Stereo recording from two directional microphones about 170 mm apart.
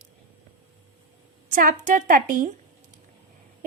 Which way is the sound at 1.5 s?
55° right (ahead or behind).